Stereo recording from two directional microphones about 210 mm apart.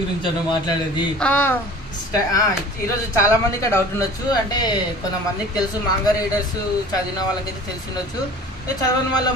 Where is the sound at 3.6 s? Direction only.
15° left (ahead or behind).